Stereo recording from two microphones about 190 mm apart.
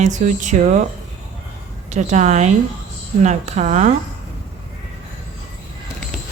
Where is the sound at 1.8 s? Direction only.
40° right (ahead or behind).